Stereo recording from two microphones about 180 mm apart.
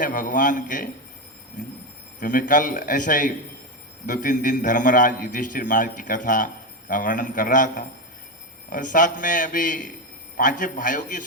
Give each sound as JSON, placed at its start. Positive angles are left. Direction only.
{"t": 0.0, "sound": "a man's voice", "side_deg": 50}
{"t": 2.2, "sound": "a man's voice", "side_deg": 50}